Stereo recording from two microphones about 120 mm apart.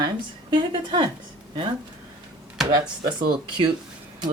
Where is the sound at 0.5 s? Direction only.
40° right (ahead or behind).